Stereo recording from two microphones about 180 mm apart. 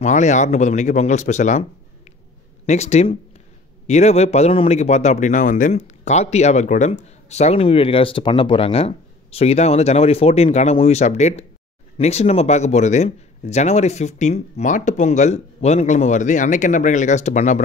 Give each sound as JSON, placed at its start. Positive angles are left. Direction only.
{"t": 0.0, "sound": "a man's voice", "side_deg": 40}